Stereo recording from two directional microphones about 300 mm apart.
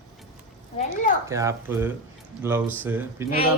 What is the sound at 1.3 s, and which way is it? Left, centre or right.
Speech, centre.